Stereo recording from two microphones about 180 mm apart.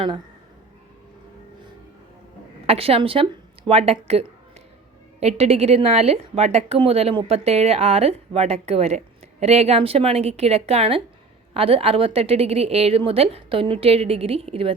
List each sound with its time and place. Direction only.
2.6 s a woman's voice: 35° right (ahead or behind)